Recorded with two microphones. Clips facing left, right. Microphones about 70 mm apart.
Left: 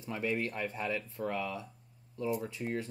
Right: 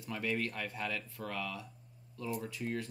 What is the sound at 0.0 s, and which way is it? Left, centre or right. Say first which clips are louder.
Speech: left 2 dB; left.